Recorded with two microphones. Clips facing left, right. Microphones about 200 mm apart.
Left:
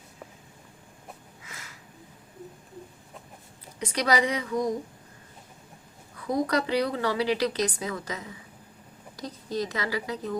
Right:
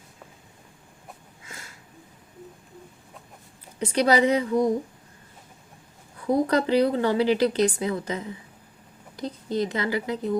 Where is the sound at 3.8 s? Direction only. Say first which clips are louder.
Right 5 dB; 30° right (ahead or behind).